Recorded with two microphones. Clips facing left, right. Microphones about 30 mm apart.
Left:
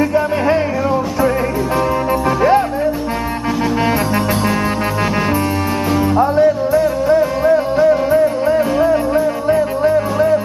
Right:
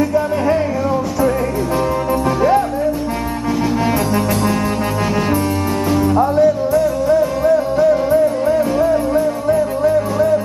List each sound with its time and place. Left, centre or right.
0.0 s music: left
5.9 s music: left